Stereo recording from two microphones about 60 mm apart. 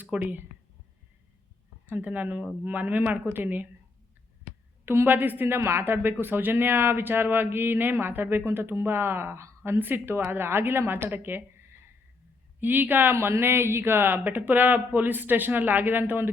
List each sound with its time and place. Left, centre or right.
0.2 s a woman's voice: right
1.9 s a woman's voice: right
4.9 s a woman's voice: right
5.5 s a woman's voice: right
13.1 s a woman's voice: right